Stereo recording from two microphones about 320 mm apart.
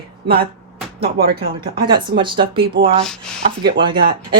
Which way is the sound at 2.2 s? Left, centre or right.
Centre.